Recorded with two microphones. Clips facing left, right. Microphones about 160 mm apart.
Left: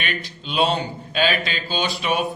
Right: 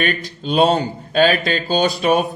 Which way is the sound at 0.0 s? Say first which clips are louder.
Right 8 dB; 45° right (ahead or behind).